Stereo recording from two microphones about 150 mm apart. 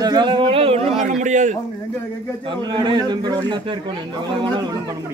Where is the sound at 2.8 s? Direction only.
30° right (ahead or behind).